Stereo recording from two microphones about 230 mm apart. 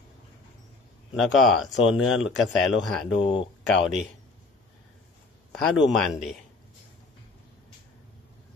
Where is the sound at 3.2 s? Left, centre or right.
Left.